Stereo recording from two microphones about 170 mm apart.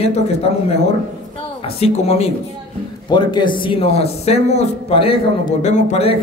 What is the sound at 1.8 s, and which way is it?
Speech, 40° left (ahead or behind).